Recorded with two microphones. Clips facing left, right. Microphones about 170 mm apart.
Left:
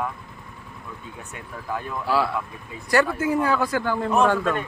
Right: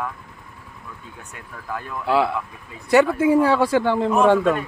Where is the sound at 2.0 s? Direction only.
20° right (ahead or behind).